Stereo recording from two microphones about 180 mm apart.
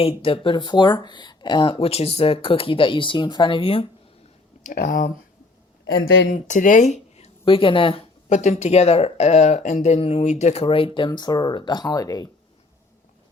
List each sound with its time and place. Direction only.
0.0 s speech: 30° left (ahead or behind)
4.6 s speech: 50° left (ahead or behind)
5.8 s speech: 90° left
6.3 s speech: 45° left (ahead or behind); by 12.3 s 20° left (ahead or behind)